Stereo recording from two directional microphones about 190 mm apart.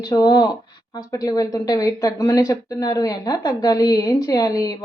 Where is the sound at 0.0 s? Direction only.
20° left (ahead or behind).